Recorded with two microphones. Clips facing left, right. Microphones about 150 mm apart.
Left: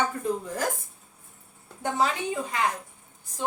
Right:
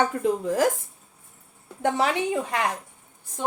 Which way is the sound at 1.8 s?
75° right (ahead or behind).